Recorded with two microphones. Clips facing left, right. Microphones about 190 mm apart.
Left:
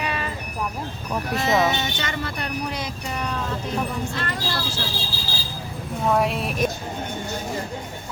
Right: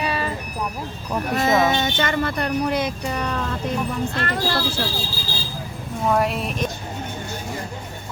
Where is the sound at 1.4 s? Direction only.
50° right (ahead or behind).